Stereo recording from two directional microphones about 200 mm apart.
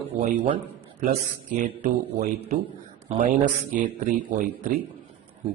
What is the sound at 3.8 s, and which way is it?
Speech, 40° right (ahead or behind).